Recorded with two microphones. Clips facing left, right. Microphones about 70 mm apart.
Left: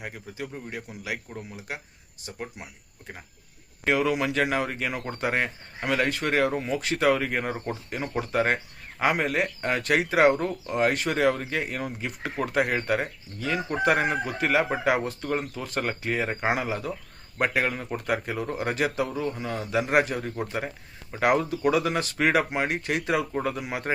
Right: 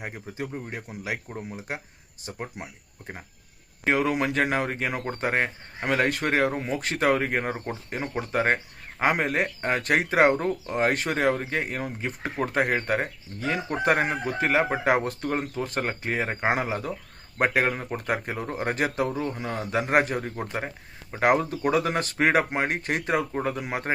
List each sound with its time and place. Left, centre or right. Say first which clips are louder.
0.0 s speech: right 2 dB; right
3.8 s speech: even; right
9.2 s speech: even; right